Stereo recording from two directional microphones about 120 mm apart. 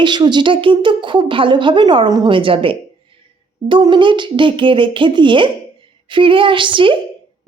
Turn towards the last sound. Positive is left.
turn(degrees=-45)  # may be behind; listen again after turning